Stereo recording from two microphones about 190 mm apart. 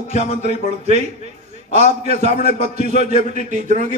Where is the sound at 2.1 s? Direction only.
50° left (ahead or behind).